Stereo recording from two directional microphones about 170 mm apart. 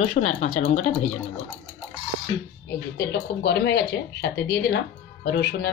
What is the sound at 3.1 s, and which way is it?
Speech, 70° left (ahead or behind).